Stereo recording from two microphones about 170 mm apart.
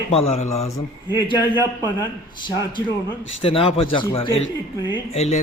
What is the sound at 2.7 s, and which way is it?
A man's voice, 30° left (ahead or behind).